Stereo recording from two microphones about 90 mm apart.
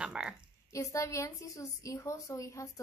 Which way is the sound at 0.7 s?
35° left (ahead or behind).